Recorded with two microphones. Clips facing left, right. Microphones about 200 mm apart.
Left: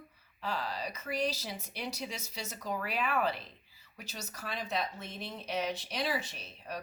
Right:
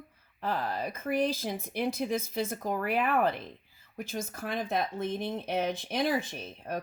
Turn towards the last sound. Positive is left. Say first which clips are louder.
# right 6 dB
turn(degrees=-50)  # may be behind; listen again after turning